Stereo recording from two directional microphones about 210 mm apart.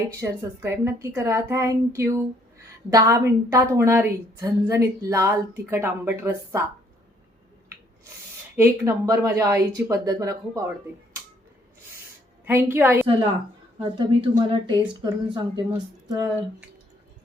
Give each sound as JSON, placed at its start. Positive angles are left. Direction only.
{"t": 0.1, "sound": "a woman's voice", "side_deg": -10}
{"t": 8.5, "sound": "a woman's voice", "side_deg": -10}
{"t": 12.5, "sound": "a woman's voice", "side_deg": -10}
{"t": 13.8, "sound": "speech", "side_deg": -25}